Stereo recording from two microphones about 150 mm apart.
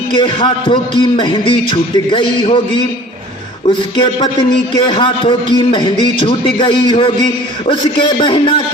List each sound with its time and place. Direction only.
0.1 s a man's voice: 35° left (ahead or behind)